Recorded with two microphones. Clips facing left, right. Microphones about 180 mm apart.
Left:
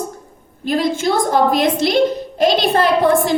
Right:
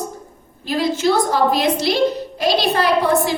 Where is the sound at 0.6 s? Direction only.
50° left (ahead or behind).